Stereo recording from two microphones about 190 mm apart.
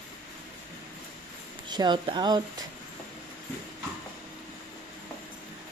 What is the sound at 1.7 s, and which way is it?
Speech, 25° right (ahead or behind).